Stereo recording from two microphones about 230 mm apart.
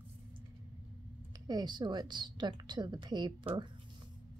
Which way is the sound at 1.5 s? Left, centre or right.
Centre.